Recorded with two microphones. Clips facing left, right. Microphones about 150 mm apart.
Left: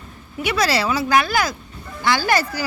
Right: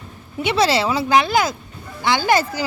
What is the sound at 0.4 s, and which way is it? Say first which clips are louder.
A woman's voice: right 2 dB; 25° right (ahead or behind).